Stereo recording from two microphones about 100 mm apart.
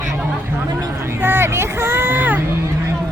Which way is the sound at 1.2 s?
25° right (ahead or behind).